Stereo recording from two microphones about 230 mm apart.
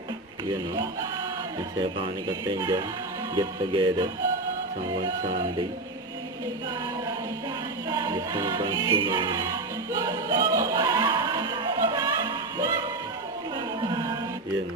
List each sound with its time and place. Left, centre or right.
1.8 s music: centre
3.3 s speech: centre
7.9 s music: centre
13.8 s music: centre